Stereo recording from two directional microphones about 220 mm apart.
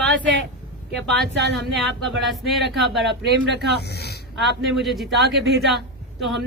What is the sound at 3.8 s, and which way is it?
Speech, 45° left (ahead or behind).